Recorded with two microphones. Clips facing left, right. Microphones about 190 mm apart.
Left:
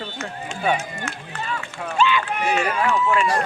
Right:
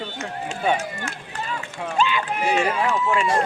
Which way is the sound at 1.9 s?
30° right (ahead or behind).